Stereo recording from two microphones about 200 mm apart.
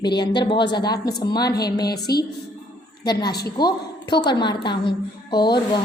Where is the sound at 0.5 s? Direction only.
20° left (ahead or behind).